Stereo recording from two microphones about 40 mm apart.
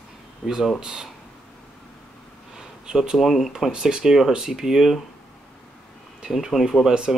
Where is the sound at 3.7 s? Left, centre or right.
Right.